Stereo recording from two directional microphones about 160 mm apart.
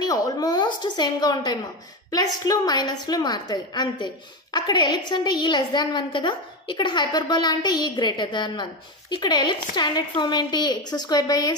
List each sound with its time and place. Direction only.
0.0 s a woman's voice: 25° left (ahead or behind)